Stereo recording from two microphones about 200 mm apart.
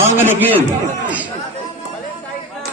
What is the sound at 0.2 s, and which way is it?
Speech, 10° right (ahead or behind).